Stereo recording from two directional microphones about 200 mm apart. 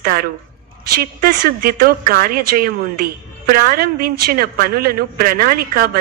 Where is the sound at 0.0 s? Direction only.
45° right (ahead or behind).